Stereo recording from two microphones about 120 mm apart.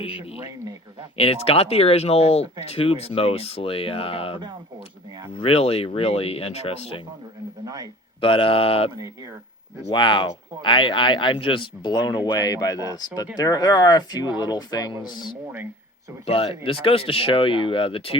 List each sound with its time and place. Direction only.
1.1 s speech: 55° left (ahead or behind)
5.4 s speech: 55° left (ahead or behind)
7.6 s a sound: 30° right (ahead or behind)
8.2 s speech: 45° left (ahead or behind)
9.9 s speech: 40° left (ahead or behind)
16.2 s speech: 50° left (ahead or behind)